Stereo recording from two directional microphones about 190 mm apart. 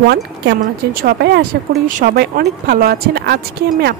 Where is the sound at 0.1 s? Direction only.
65° right (ahead or behind).